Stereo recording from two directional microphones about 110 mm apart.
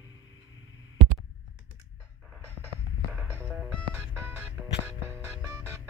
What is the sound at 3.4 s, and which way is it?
Music, 5° right (ahead or behind).